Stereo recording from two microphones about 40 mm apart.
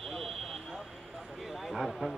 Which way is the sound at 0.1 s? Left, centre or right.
Centre.